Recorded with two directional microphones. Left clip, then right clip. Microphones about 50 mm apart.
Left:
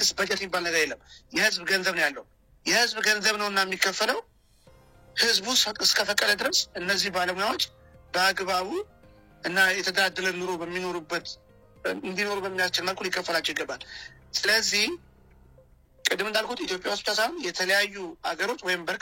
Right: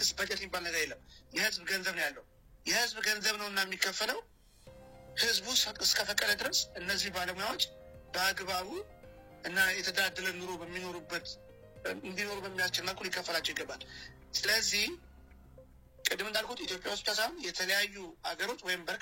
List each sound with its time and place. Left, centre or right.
0.0 s a man's voice: left
16.0 s a man's voice: left